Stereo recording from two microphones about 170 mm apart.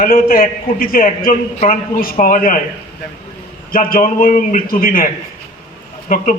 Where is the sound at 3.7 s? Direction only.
55° left (ahead or behind).